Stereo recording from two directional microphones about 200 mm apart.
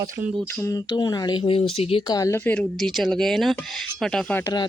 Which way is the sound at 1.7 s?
30° left (ahead or behind).